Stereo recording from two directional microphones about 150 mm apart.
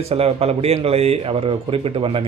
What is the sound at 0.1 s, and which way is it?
Speech, 40° right (ahead or behind).